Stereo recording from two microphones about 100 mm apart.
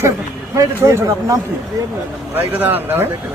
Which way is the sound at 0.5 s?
30° right (ahead or behind).